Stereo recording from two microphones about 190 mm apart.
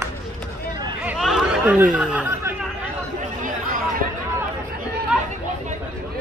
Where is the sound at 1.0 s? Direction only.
Centre (ahead or behind).